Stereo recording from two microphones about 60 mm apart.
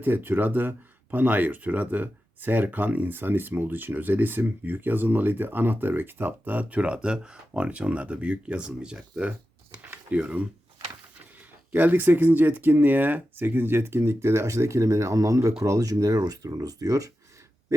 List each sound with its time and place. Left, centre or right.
0.0 s speech: right; by 9.3 s centre
9.9 s a sound: right
11.7 s speech: right